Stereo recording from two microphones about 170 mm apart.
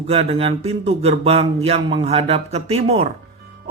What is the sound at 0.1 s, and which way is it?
Speech, 35° right (ahead or behind).